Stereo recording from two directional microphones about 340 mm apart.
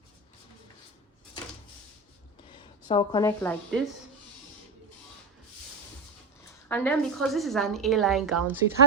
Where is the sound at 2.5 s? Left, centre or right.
Centre.